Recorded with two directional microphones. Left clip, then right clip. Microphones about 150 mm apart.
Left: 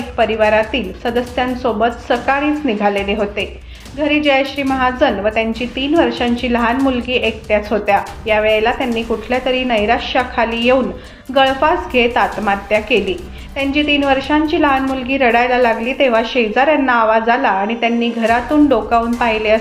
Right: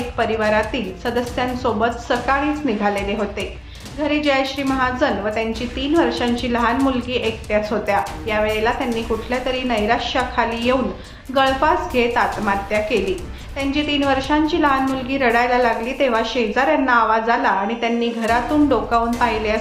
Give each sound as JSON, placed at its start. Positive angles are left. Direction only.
{"t": 0.2, "sound": "a woman's voice", "side_deg": 15}